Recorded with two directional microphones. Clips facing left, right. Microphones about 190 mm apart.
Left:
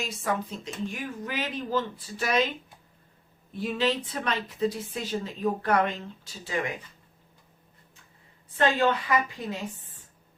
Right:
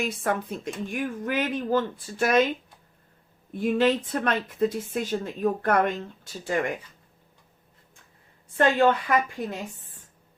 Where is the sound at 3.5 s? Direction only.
50° right (ahead or behind).